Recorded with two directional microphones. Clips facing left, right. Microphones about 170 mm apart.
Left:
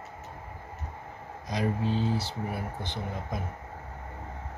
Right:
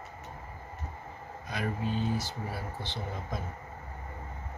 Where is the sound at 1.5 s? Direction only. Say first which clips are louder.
Left 4 dB; 30° left (ahead or behind).